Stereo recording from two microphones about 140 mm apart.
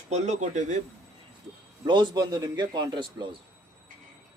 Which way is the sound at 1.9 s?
30° right (ahead or behind).